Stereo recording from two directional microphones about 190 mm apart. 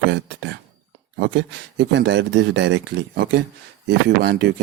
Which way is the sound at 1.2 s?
65° right (ahead or behind).